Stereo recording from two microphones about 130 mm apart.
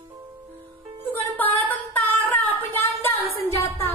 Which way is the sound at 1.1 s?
15° left (ahead or behind).